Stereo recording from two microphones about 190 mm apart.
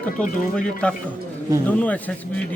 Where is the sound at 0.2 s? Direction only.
5° left (ahead or behind).